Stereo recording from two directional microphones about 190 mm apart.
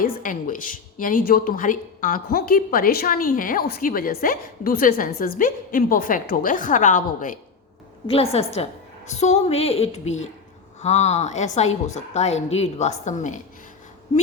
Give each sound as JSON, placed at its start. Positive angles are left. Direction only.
{"t": 0.0, "sound": "a woman's voice", "side_deg": 45}
{"t": 8.0, "sound": "a woman's voice", "side_deg": 30}